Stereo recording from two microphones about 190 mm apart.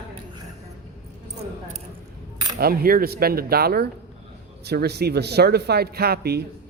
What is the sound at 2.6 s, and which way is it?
Speech, 50° right (ahead or behind).